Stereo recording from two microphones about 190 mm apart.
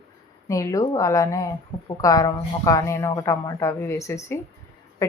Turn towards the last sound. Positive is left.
turn(degrees=15)  # may be behind; listen again after turning